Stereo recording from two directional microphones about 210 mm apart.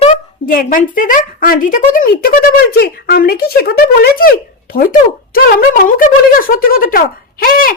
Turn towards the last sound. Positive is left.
turn(degrees=40)  # may be behind; listen again after turning